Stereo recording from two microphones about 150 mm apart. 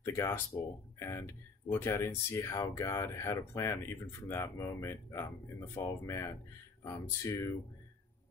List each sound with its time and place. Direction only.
0.0 s speech: 15° left (ahead or behind)